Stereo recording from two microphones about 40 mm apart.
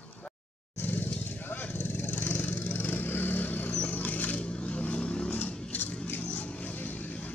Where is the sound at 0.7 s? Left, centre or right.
Left.